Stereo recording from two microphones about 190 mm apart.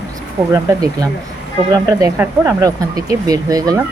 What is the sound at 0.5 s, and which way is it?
Speech, 20° right (ahead or behind).